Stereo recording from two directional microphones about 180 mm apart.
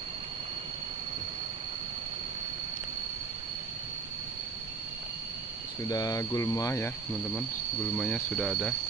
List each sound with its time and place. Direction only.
5.9 s speech: 20° left (ahead or behind)
7.9 s speech: 5° left (ahead or behind)